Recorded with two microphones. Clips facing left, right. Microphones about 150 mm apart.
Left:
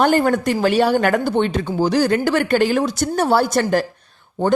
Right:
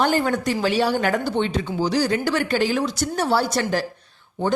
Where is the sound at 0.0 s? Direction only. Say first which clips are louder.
Left 5 dB; 50° left (ahead or behind).